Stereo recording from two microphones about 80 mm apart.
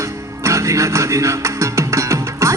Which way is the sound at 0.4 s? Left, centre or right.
Right.